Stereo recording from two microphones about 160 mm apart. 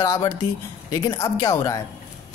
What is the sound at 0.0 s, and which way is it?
Speech, 20° left (ahead or behind).